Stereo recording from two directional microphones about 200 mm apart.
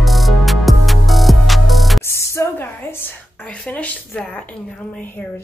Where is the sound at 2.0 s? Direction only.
15° left (ahead or behind).